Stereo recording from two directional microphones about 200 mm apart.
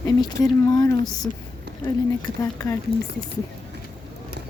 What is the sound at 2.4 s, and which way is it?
Speech, 15° left (ahead or behind).